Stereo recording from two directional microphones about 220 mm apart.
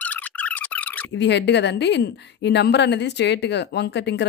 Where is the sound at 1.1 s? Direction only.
50° left (ahead or behind).